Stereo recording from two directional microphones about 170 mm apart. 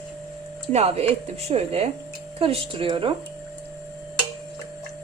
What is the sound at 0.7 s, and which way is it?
Speech, 35° right (ahead or behind).